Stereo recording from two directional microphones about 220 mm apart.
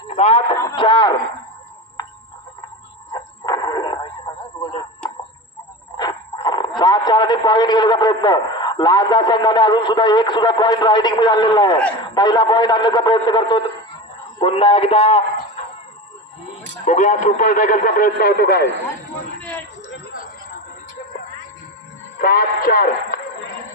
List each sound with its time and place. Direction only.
0.1 s speech: 30° left (ahead or behind)
0.6 s a sound: 20° left (ahead or behind)
3.1 s music: 20° left (ahead or behind)
4.3 s radio: 20° left (ahead or behind)
6.0 s a man's voice: 20° left (ahead or behind)
16.8 s speech: 35° left (ahead or behind)
19.4 s a sound: 5° left (ahead or behind)
22.2 s music: 40° left (ahead or behind)